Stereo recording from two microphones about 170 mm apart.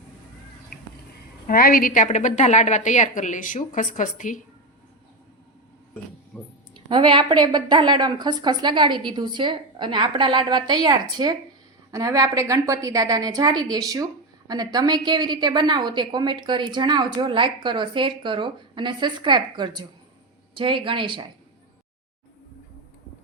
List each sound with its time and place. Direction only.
1.5 s a woman's voice: 60° left (ahead or behind)
6.7 s a woman's voice: 30° right (ahead or behind)